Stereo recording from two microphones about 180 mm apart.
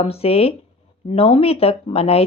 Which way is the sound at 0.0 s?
35° left (ahead or behind).